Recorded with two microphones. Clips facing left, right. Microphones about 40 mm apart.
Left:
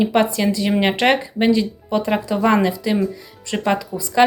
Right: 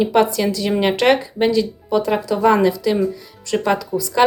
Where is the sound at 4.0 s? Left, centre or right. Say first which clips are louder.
Left 1 dB; left.